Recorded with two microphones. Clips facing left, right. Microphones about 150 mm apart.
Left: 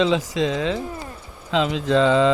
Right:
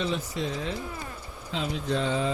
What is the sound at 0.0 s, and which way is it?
Speech, 90° left.